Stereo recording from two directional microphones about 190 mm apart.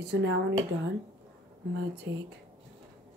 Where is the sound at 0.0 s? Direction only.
65° right (ahead or behind).